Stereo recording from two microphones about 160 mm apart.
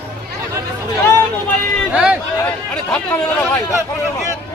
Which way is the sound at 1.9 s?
5° right (ahead or behind).